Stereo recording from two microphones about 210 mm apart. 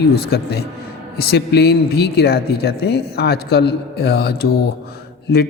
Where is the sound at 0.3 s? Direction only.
50° left (ahead or behind).